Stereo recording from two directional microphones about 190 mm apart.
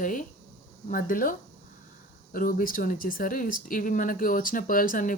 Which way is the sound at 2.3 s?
50° left (ahead or behind).